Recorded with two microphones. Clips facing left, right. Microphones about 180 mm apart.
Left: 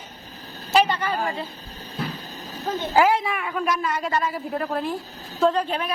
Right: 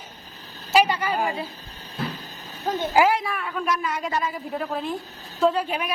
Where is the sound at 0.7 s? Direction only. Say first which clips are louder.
Even; 10° right (ahead or behind).